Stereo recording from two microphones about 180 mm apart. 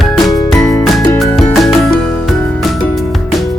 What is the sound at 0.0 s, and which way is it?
Music, centre (ahead or behind).